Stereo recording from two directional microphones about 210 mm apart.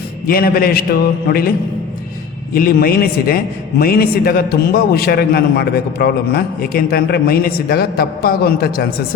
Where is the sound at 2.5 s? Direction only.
45° left (ahead or behind).